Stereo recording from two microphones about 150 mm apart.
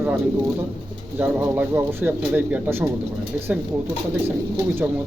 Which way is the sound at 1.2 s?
10° right (ahead or behind).